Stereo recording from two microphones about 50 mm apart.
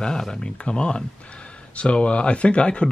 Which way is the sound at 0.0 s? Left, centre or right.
Centre.